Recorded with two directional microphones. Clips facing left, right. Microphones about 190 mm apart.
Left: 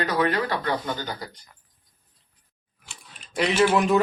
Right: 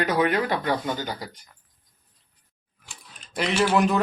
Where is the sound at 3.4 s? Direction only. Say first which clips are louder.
Left 1 dB; centre (ahead or behind).